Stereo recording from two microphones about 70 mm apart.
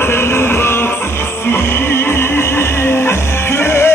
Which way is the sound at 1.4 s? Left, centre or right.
Left.